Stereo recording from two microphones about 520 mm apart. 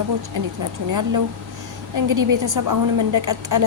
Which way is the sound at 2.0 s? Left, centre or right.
Right.